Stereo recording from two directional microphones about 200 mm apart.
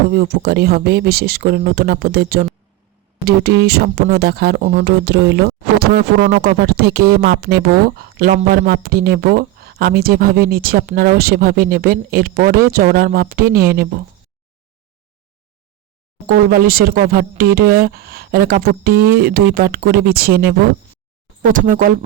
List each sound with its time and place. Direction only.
0.1 s speech: 50° right (ahead or behind)
13.5 s speech: 15° right (ahead or behind)
16.2 s speech: 45° right (ahead or behind)
21.4 s speech: 40° right (ahead or behind)